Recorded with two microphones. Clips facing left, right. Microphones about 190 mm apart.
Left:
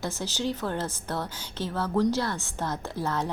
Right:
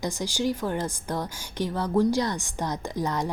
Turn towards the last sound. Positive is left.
turn(degrees=-15)  # may be behind; listen again after turning